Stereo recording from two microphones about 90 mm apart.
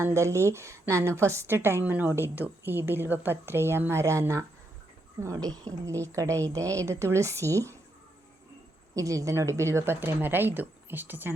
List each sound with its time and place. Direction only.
0.0 s a woman's voice: 30° right (ahead or behind)
9.0 s a woman's voice: 40° right (ahead or behind); by 11.3 s 20° right (ahead or behind)